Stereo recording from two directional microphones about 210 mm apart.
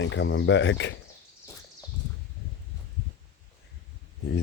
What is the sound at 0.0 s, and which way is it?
Speech, 60° left (ahead or behind).